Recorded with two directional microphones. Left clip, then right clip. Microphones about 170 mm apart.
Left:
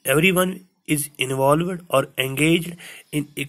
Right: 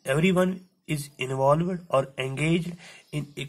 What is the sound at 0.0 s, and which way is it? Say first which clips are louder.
A woman's voice: left 6 dB; 25° left (ahead or behind).